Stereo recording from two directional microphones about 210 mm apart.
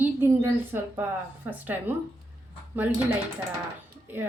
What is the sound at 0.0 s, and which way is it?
A woman's voice, 10° right (ahead or behind).